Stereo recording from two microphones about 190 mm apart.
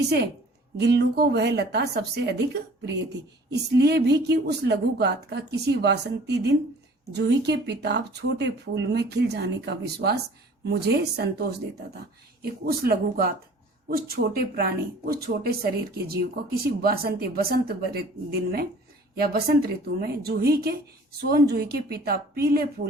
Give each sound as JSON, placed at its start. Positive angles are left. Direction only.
{"t": 0.8, "sound": "speech", "side_deg": -60}
{"t": 12.4, "sound": "speech", "side_deg": -55}